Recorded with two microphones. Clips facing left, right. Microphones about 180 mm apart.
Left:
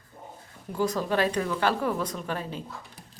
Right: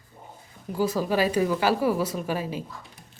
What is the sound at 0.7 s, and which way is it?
Speech, 5° right (ahead or behind).